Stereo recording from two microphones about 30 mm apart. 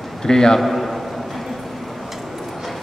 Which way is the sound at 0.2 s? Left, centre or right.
Left.